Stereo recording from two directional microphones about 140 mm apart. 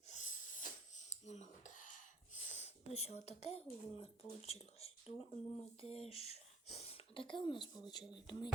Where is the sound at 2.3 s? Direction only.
55° left (ahead or behind).